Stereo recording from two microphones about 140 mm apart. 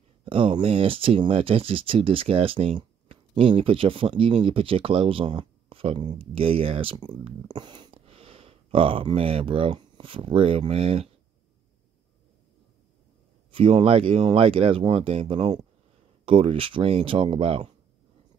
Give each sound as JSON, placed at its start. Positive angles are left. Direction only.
{"t": 0.2, "sound": "speech", "side_deg": -40}
{"t": 13.5, "sound": "speech", "side_deg": -40}